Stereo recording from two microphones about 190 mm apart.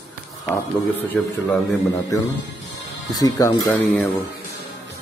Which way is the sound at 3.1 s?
20° left (ahead or behind).